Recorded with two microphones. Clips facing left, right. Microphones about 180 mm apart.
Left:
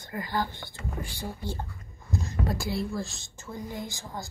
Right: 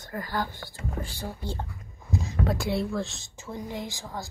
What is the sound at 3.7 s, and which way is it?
Speech, 90° right.